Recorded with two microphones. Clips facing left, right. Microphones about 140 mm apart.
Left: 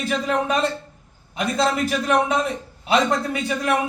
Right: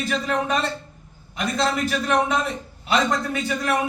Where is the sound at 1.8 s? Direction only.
20° left (ahead or behind).